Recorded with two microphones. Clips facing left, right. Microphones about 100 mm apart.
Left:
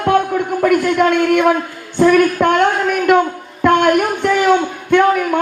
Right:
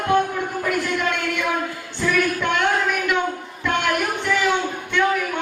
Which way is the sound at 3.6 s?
50° left (ahead or behind).